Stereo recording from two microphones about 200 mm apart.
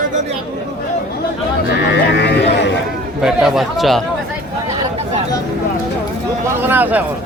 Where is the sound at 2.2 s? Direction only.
60° left (ahead or behind).